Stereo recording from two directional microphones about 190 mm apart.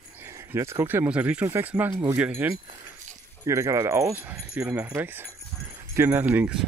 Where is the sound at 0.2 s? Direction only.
15° right (ahead or behind).